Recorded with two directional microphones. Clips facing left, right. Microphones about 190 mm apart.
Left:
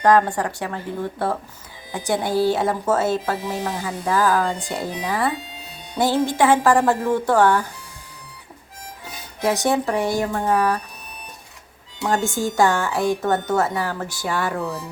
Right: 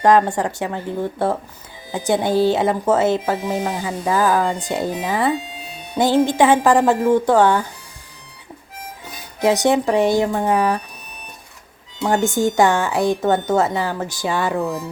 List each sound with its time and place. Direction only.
0.0 s speech: 20° right (ahead or behind)
9.4 s speech: 20° right (ahead or behind)
12.0 s speech: 20° right (ahead or behind)